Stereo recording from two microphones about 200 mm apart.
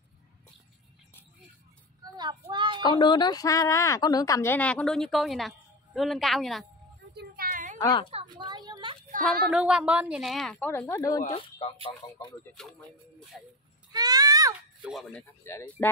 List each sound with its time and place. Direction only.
2.0 s child singing: 20° right (ahead or behind)
2.8 s a woman's voice: 20° left (ahead or behind); by 6.6 s centre (ahead or behind)
7.2 s a sound: 45° right (ahead or behind)
7.8 s a woman's voice: 20° left (ahead or behind)
8.1 s speech: 25° right (ahead or behind)
9.2 s a woman's voice: 5° right (ahead or behind); by 11.4 s 20° left (ahead or behind)
12.5 s a woman's voice: centre (ahead or behind)
13.9 s a child's voice: 20° right (ahead or behind)
14.9 s a woman's voice: centre (ahead or behind)
15.4 s a woman's voice: 10° left (ahead or behind)